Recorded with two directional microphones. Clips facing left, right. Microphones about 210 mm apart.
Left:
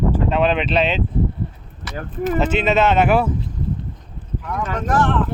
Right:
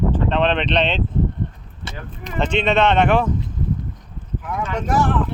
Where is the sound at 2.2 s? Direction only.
5° left (ahead or behind).